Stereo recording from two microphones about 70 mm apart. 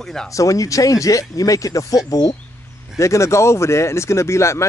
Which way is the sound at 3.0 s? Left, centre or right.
Left.